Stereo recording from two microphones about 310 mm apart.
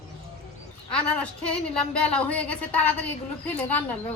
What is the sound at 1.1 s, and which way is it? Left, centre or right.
A woman's voice, centre.